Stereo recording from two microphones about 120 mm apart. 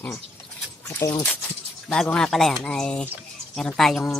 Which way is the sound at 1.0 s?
25° left (ahead or behind).